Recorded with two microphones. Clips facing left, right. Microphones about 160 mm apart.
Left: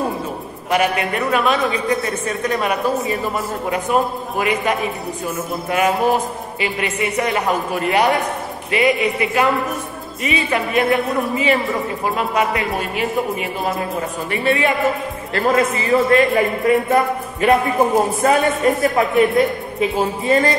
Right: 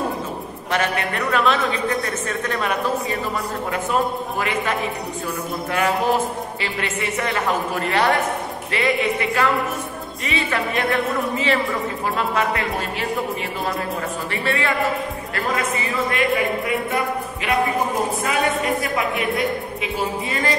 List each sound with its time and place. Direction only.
0.7 s a man's voice: 10° left (ahead or behind)
5.7 s music: 20° left (ahead or behind)
6.6 s a man's voice: 15° left (ahead or behind)
10.2 s music: 20° left (ahead or behind)
12.4 s a man's voice: 15° left (ahead or behind)
14.3 s music: 20° left (ahead or behind)
15.3 s a man's voice: 35° left (ahead or behind)